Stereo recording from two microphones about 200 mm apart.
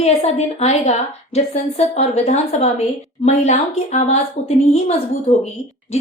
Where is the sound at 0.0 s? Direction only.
30° left (ahead or behind).